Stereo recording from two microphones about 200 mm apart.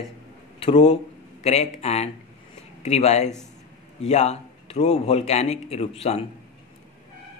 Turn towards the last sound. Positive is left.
turn(degrees=30)  # may be behind; listen again after turning